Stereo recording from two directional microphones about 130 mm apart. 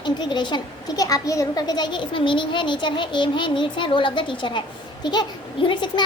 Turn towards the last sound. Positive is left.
turn(degrees=35)  # may be behind; listen again after turning